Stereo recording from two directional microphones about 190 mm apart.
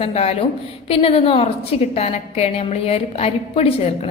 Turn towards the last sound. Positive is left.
turn(degrees=35)  # may be behind; listen again after turning